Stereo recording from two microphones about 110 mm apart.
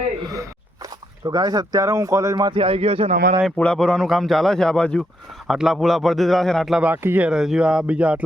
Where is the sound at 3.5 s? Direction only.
10° left (ahead or behind).